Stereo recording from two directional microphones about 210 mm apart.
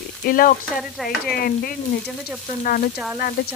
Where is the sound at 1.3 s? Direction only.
45° left (ahead or behind).